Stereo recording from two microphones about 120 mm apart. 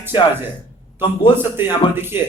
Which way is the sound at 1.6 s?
20° right (ahead or behind).